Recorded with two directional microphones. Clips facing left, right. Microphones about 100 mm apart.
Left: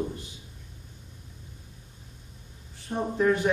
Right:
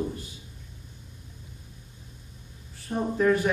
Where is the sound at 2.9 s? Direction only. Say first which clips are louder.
Right 1 dB; 20° left (ahead or behind).